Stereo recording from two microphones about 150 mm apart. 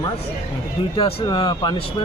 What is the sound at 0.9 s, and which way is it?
Speech, 35° left (ahead or behind).